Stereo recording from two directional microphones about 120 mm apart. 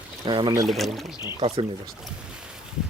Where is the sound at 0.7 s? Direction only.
Centre (ahead or behind).